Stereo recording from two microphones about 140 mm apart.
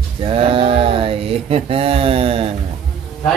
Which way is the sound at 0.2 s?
40° right (ahead or behind).